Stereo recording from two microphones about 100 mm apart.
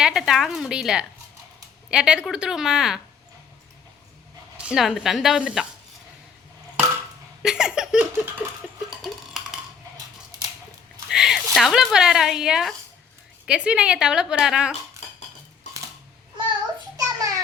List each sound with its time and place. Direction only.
0.0 s a woman's voice: 5° right (ahead or behind)
4.5 s speech: 10° right (ahead or behind)
7.4 s laughter: 5° right (ahead or behind)
9.0 s a sound: 5° right (ahead or behind)
11.1 s a woman's voice: 5° right (ahead or behind)
16.5 s child singing: 50° right (ahead or behind)